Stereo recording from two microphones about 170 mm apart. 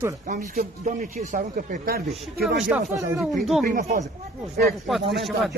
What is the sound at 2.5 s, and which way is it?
Speech, 5° right (ahead or behind).